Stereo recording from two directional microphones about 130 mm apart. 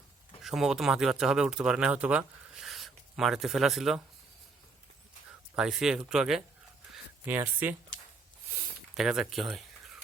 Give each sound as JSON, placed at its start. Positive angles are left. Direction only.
{"t": 0.4, "sound": "speech", "side_deg": -5}
{"t": 5.5, "sound": "speech", "side_deg": -5}
{"t": 7.3, "sound": "speech", "side_deg": -15}
{"t": 9.0, "sound": "speech", "side_deg": -5}